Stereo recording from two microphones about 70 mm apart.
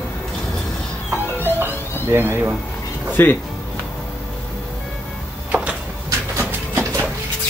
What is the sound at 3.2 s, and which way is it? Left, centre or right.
Speech, left.